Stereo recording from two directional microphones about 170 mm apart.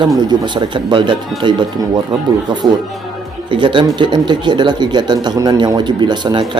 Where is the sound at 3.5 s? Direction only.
30° right (ahead or behind).